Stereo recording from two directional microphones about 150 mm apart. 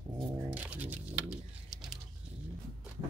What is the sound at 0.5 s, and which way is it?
Music, 10° right (ahead or behind).